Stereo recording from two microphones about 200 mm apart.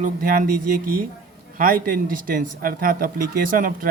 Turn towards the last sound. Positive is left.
turn(degrees=-45)  # may be behind; listen again after turning